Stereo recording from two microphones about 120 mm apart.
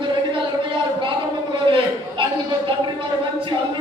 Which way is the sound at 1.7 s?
45° right (ahead or behind).